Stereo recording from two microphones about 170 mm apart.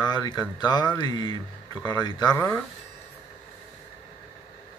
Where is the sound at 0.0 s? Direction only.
25° left (ahead or behind).